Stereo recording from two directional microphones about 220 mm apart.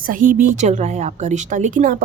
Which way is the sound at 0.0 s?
35° right (ahead or behind).